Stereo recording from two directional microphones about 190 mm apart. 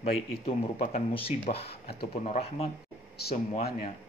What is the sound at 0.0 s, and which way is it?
Speech, 35° left (ahead or behind).